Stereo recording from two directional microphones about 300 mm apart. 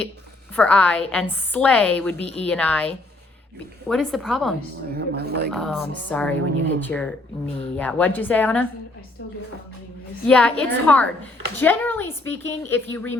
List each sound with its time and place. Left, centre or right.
0.5 s a woman's voice: centre
4.9 s a woman's voice: right
5.5 s a woman's voice: centre
10.2 s a woman's voice: centre